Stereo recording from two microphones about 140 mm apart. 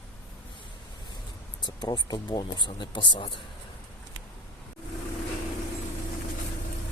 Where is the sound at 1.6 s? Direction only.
30° left (ahead or behind).